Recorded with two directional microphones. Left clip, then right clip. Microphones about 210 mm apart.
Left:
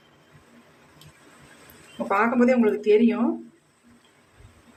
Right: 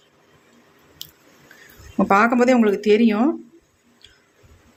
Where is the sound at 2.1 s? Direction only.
45° right (ahead or behind).